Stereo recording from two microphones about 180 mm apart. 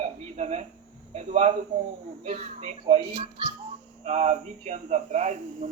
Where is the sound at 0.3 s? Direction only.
40° right (ahead or behind).